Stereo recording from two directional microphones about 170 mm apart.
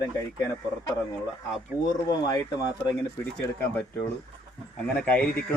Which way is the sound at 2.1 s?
20° left (ahead or behind).